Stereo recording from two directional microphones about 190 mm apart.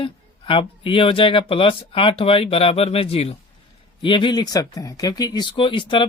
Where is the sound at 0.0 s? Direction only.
25° left (ahead or behind).